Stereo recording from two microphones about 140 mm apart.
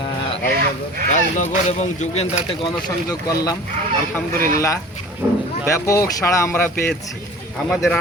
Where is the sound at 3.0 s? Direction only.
25° left (ahead or behind).